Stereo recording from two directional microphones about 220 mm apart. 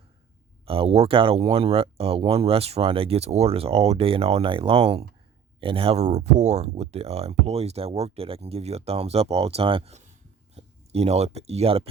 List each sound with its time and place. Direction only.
0.6 s speech: 25° right (ahead or behind)